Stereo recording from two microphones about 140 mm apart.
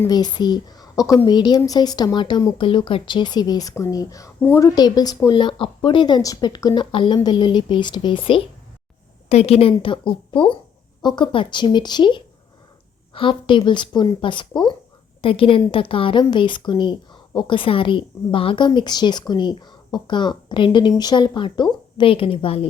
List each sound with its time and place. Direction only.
0.1 s a woman's voice: 30° left (ahead or behind)
4.7 s a woman's voice: 30° left (ahead or behind)
9.3 s a woman's voice: 50° left (ahead or behind)